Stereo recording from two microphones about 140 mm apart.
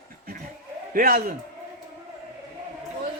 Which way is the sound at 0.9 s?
90° right.